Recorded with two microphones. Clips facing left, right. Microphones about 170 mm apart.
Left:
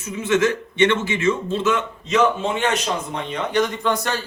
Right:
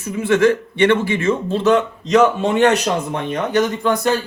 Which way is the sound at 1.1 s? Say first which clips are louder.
Right 2 dB; 55° right (ahead or behind).